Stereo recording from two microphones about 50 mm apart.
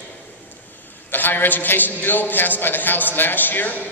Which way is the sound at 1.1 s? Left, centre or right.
Left.